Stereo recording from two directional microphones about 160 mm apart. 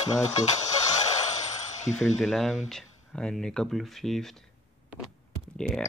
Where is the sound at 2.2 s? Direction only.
Centre (ahead or behind).